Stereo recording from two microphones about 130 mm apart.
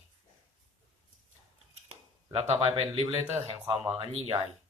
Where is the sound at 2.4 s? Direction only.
55° right (ahead or behind).